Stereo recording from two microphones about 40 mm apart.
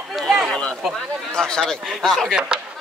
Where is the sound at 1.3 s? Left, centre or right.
Left.